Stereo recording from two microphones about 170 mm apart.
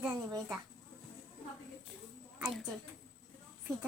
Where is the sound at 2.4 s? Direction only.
Centre (ahead or behind).